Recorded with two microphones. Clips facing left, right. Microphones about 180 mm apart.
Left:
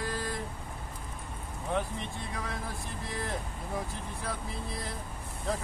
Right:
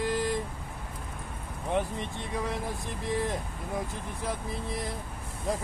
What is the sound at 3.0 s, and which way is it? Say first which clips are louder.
Speech: right 7 dB; 20° right (ahead or behind).